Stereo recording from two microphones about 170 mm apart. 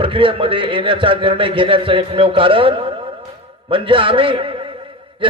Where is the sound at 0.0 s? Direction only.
30° right (ahead or behind).